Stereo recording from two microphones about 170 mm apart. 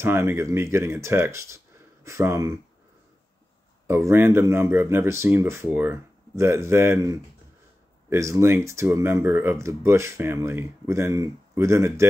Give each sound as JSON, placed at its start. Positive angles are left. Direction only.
{"t": 0.0, "sound": "speech", "side_deg": -15}
{"t": 3.8, "sound": "speech", "side_deg": -15}